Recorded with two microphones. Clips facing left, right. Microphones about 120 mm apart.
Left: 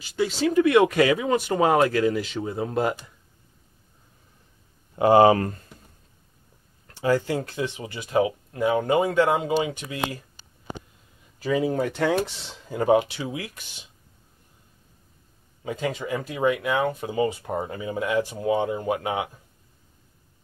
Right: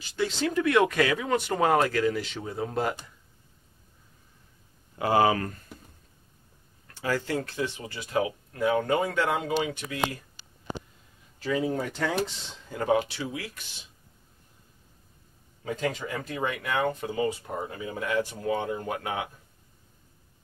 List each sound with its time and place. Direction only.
0.2 s speech: 15° left (ahead or behind)
4.9 s speech: 25° left (ahead or behind)
6.9 s speech: 20° left (ahead or behind)
11.3 s speech: 15° left (ahead or behind)
12.6 s speech: 20° left (ahead or behind)
15.6 s speech: 5° left (ahead or behind)
17.1 s speech: 25° left (ahead or behind)